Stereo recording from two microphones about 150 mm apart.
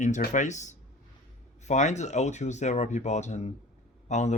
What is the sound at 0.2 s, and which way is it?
Speech, 55° left (ahead or behind).